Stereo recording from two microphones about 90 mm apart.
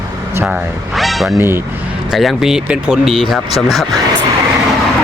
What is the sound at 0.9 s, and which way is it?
Speech, centre (ahead or behind).